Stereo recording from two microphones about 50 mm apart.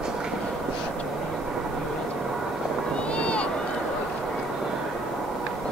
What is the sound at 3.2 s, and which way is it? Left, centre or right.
Run, left.